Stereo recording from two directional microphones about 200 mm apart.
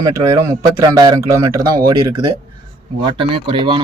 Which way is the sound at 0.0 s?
15° right (ahead or behind).